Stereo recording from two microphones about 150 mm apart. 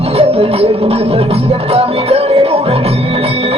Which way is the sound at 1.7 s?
40° right (ahead or behind).